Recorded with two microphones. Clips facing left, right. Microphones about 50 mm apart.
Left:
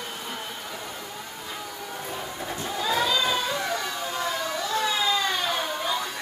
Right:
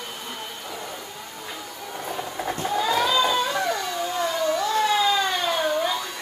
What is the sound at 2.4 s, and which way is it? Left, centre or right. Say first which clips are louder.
Goat: right 6 dB; right.